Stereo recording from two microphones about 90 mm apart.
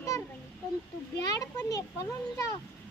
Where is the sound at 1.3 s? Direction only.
40° left (ahead or behind).